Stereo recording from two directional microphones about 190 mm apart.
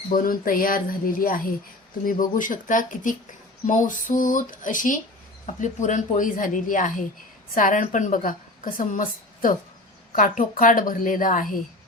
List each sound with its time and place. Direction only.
0.1 s a woman's voice: 45° left (ahead or behind)